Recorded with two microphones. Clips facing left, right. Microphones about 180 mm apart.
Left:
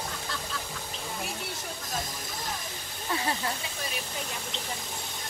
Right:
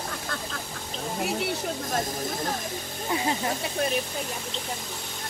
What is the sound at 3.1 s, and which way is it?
Speech, 20° right (ahead or behind).